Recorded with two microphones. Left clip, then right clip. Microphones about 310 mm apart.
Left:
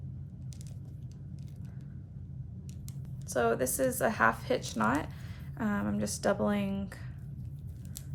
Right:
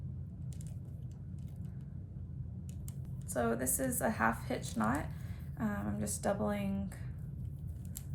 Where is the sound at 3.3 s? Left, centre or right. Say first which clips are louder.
Left 6 dB; centre.